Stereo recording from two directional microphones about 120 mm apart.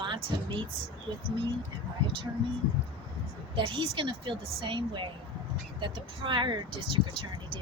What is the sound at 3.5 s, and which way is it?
Speech, 45° right (ahead or behind).